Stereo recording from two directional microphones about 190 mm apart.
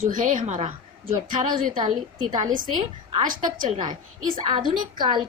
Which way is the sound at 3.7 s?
25° right (ahead or behind).